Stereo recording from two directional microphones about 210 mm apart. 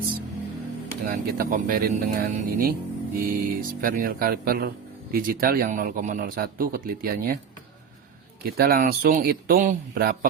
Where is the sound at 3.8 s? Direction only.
40° right (ahead or behind).